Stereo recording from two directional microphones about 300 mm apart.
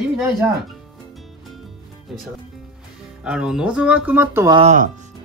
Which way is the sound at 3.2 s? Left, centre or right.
Centre.